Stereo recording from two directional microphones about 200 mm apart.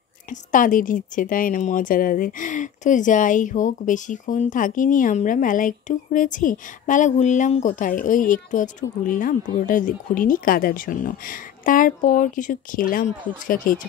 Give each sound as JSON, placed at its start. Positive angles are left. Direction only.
{"t": 0.3, "sound": "a woman's voice", "side_deg": 40}